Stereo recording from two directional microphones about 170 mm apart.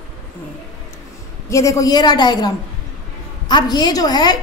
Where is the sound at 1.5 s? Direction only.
20° left (ahead or behind).